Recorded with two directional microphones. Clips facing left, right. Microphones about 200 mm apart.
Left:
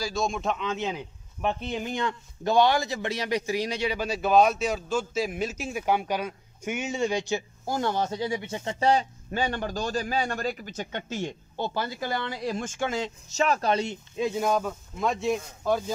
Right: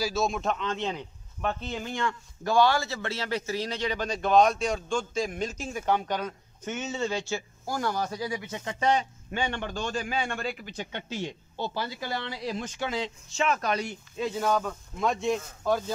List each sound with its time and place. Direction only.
0.0 s speech: 5° right (ahead or behind)
1.4 s speech: 15° left (ahead or behind)
14.2 s speech: 10° left (ahead or behind)